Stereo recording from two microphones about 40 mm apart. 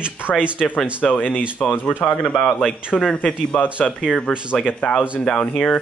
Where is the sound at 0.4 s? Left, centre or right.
Right.